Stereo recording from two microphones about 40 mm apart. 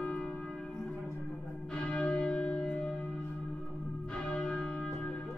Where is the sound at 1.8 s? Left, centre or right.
Left.